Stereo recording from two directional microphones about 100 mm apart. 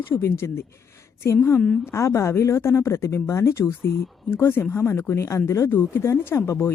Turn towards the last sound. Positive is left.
turn(degrees=25)  # may be behind; listen again after turning